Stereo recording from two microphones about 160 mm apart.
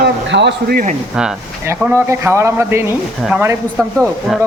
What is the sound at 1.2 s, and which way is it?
A man's voice, 5° right (ahead or behind).